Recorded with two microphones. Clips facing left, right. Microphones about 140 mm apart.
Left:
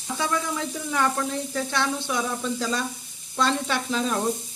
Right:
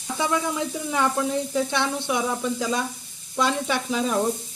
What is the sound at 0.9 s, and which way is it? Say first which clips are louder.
Sizzle: right 2 dB; 15° right (ahead or behind).